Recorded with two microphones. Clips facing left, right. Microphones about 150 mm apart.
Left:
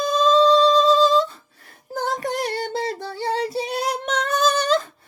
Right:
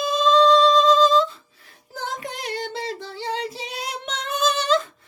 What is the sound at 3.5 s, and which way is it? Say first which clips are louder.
Child singing: left 9 dB; 35° left (ahead or behind).